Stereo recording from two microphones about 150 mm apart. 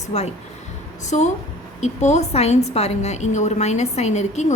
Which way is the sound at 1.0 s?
50° left (ahead or behind).